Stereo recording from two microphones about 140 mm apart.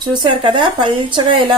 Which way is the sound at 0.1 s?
35° right (ahead or behind).